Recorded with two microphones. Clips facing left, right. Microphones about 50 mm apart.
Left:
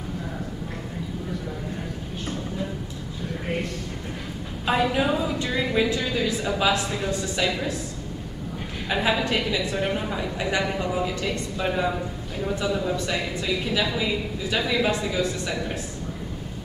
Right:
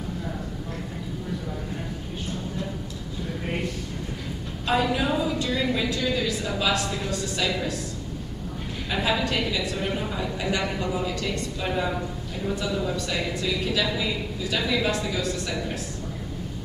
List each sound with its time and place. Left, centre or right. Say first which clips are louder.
4.6 s a woman's voice: left 1 dB; centre
8.9 s a woman's voice: left 2 dB; centre
11.6 s a woman's voice: left 3 dB; centre
13.1 s a woman's voice: left 1 dB; centre